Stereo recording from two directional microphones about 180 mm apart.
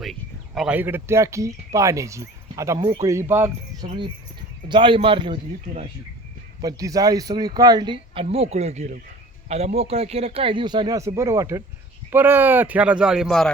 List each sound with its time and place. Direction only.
0.0 s speech: centre (ahead or behind)
4.7 s speech: 30° right (ahead or behind); by 13.5 s centre (ahead or behind)